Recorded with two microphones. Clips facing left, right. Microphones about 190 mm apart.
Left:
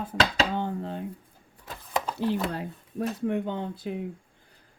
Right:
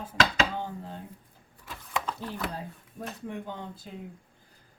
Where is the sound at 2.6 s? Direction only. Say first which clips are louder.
Left 7 dB; 65° left (ahead or behind).